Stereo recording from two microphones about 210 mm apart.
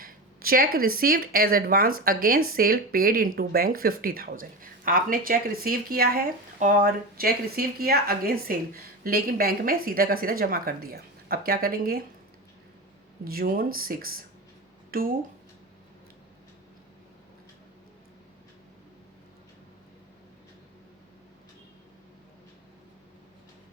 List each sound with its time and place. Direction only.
0.0 s speech: 45° right (ahead or behind)
13.2 s speech: 45° right (ahead or behind)
14.8 s a sound: 45° right (ahead or behind)